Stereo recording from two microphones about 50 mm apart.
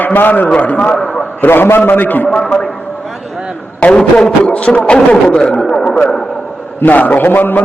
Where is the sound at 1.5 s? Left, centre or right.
Left.